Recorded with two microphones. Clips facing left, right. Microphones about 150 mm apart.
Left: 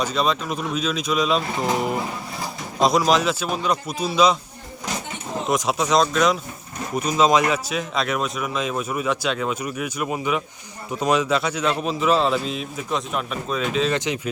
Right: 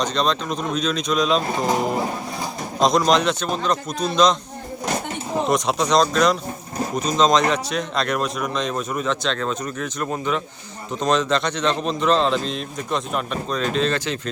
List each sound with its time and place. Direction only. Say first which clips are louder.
0.0 s a man's voice: right 1 dB; 5° left (ahead or behind)
5.5 s a man's voice: even; centre (ahead or behind)
13.9 s a man's voice: left 1 dB; 15° left (ahead or behind)